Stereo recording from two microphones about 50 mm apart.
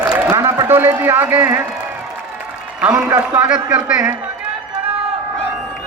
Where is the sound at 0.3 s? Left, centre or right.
Right.